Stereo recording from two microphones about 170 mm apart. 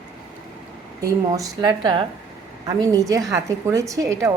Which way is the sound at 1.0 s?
20° right (ahead or behind).